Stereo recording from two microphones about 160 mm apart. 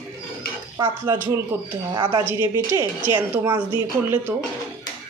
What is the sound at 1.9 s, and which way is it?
Speech, 30° right (ahead or behind).